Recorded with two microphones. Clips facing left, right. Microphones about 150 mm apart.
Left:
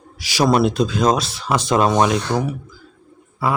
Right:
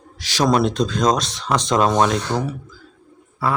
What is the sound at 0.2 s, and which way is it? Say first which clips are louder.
Speech: left 1 dB; 10° left (ahead or behind).